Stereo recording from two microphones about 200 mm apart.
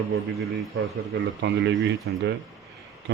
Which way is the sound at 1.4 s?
60° right (ahead or behind).